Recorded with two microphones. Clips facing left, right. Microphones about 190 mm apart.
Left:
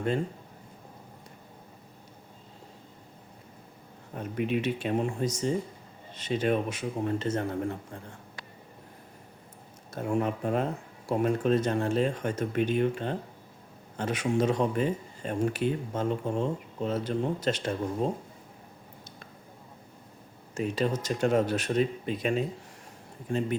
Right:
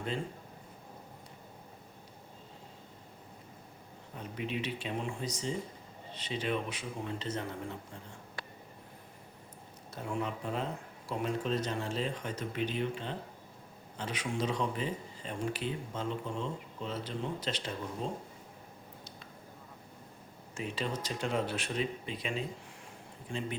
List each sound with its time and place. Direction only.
4.1 s speech: 55° left (ahead or behind)
9.9 s speech: 50° left (ahead or behind)
20.6 s speech: 45° left (ahead or behind)